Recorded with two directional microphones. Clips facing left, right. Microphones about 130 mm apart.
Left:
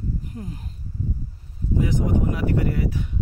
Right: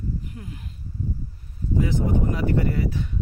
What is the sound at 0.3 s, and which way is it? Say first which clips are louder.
Speech: left 4 dB; 35° left (ahead or behind).